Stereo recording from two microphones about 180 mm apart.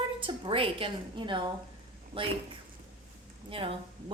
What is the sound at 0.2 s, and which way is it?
A woman's voice, 30° right (ahead or behind).